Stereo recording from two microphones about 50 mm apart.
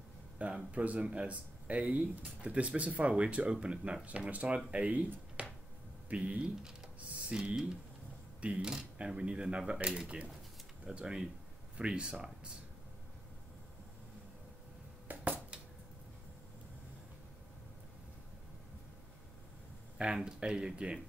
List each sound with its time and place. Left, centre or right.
0.4 s speech: right
15.0 s a sound: right
20.2 s speech: centre